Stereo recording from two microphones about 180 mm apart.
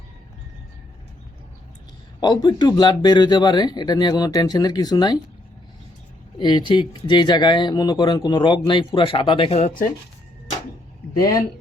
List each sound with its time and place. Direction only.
2.2 s speech: 25° left (ahead or behind)
6.4 s speech: 25° left (ahead or behind); by 9.9 s 40° left (ahead or behind)